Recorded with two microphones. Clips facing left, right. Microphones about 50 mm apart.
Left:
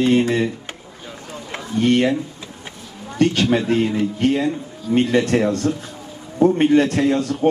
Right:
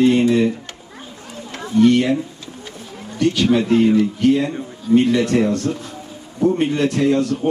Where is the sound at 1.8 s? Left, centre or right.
Left.